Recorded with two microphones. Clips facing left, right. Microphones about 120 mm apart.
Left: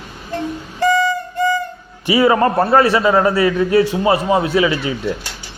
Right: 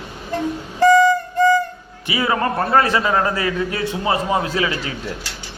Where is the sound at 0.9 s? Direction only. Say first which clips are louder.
Right 4 dB; 5° left (ahead or behind).